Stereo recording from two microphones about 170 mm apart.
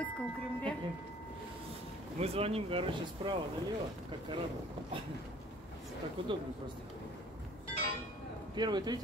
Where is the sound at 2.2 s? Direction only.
35° right (ahead or behind).